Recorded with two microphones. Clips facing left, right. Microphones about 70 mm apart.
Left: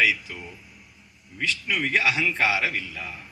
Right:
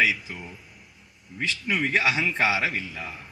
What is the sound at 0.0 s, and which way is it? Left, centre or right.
Speech, right.